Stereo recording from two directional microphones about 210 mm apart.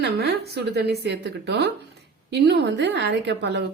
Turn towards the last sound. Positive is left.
turn(degrees=-55)  # may be behind; listen again after turning